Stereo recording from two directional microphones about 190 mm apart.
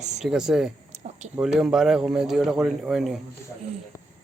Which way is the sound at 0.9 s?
35° right (ahead or behind).